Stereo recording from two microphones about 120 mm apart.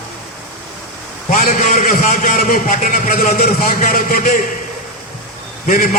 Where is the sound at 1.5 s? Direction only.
80° left.